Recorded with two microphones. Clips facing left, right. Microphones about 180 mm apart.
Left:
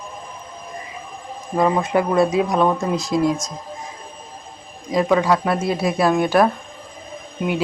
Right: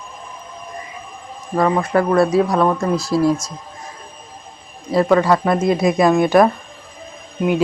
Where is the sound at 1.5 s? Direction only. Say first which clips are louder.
Right 1 dB; 20° left (ahead or behind).